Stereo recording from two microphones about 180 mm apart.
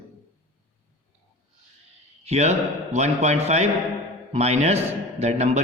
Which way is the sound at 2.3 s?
40° right (ahead or behind).